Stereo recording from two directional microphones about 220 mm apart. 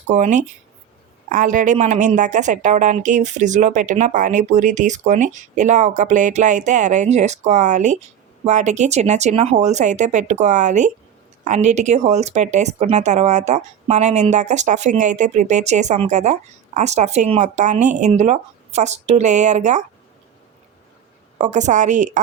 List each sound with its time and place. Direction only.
0.1 s speech: 35° right (ahead or behind)
21.3 s speech: 30° right (ahead or behind)